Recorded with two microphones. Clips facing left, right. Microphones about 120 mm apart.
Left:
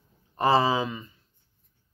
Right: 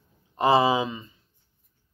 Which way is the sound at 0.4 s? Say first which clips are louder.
Right 2 dB; 15° right (ahead or behind).